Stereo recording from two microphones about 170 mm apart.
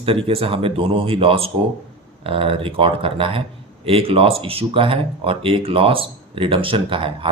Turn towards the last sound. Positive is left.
turn(degrees=-30)  # may be behind; listen again after turning